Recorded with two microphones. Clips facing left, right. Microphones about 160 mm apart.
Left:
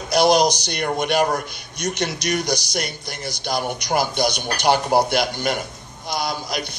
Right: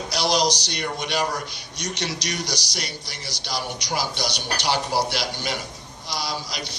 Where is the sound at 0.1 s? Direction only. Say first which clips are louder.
Left 7 dB; 50° left (ahead or behind).